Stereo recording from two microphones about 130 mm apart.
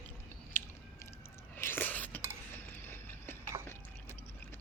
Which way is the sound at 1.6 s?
15° left (ahead or behind).